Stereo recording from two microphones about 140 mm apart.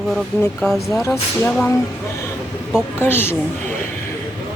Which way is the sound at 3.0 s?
15° left (ahead or behind).